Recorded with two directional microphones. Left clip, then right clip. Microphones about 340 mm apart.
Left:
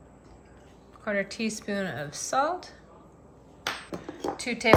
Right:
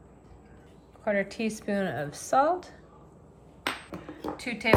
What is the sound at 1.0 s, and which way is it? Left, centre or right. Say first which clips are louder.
Speech: right 1 dB; centre.